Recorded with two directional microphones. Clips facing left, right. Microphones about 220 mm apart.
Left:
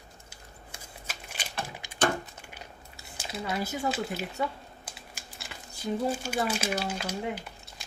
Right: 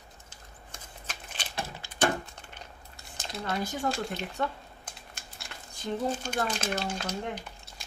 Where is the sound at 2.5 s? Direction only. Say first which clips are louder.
Left 1 dB; 5° left (ahead or behind).